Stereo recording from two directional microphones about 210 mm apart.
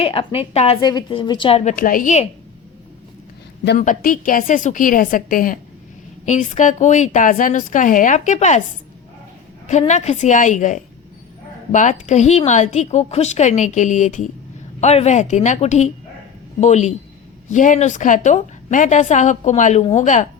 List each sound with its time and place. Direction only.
0.0 s a woman's voice: 25° left (ahead or behind)
1.7 s a woman's voice: 40° left (ahead or behind)
3.8 s a woman's voice: 40° left (ahead or behind)
9.6 s a woman's voice: 35° left (ahead or behind)